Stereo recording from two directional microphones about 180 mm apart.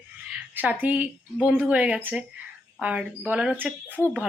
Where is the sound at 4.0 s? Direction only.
10° left (ahead or behind).